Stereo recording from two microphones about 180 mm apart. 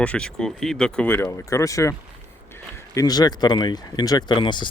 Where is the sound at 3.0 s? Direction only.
20° left (ahead or behind).